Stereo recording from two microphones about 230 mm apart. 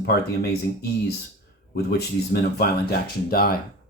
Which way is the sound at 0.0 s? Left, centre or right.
Left.